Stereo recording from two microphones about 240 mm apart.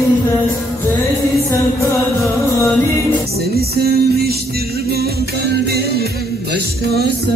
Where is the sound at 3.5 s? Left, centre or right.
Right.